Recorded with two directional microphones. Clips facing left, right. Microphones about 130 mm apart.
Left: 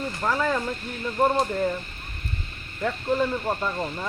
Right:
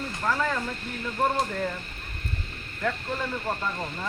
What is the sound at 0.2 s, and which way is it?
Speech, 20° left (ahead or behind).